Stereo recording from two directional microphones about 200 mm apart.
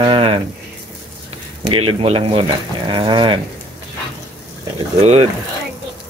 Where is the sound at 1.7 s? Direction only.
30° right (ahead or behind).